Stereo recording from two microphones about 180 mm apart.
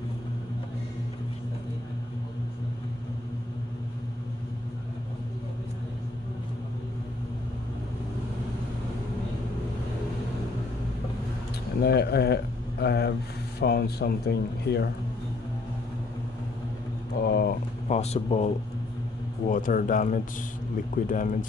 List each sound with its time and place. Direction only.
11.8 s speech: 65° left (ahead or behind)
17.2 s a sound: 60° left (ahead or behind)
17.8 s a man's voice: 35° left (ahead or behind)